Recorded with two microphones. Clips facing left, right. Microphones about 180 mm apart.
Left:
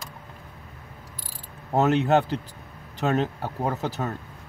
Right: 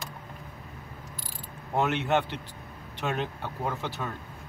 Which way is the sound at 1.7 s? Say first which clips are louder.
Left 6 dB; 40° left (ahead or behind).